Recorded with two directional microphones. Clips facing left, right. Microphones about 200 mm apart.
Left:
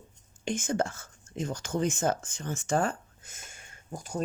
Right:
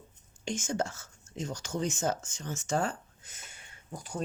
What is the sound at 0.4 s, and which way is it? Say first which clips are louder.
Speech: left 3 dB; 55° left (ahead or behind).